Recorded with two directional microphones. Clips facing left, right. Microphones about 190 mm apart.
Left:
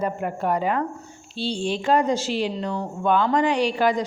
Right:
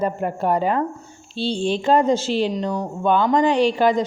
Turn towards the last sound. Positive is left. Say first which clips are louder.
# right 4 dB
turn(degrees=-25)  # may be behind; listen again after turning